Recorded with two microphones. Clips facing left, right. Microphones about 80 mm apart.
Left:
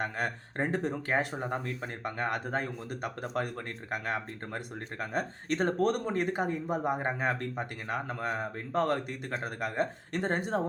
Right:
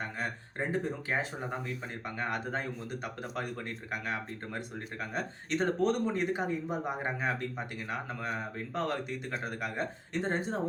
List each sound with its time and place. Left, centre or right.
0.0 s speech: left
1.4 s speech: left